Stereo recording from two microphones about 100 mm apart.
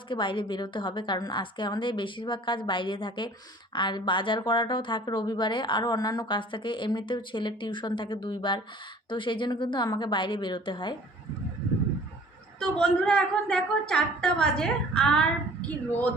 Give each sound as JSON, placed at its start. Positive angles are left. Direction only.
{"t": 0.1, "sound": "a woman's voice", "side_deg": 55}
{"t": 12.5, "sound": "a woman's voice", "side_deg": 5}